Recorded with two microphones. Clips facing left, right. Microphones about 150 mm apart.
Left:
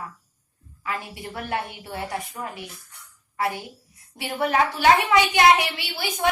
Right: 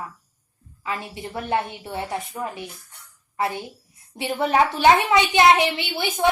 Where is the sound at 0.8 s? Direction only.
25° right (ahead or behind).